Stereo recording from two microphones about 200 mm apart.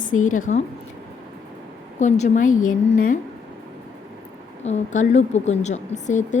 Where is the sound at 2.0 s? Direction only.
40° left (ahead or behind).